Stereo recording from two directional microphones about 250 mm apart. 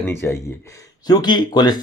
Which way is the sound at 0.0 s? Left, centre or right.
Centre.